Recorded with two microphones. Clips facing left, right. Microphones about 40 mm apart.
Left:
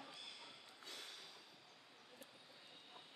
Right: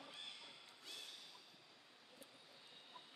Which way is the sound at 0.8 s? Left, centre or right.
Left.